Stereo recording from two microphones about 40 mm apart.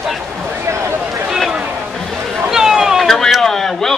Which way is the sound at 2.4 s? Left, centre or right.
Centre.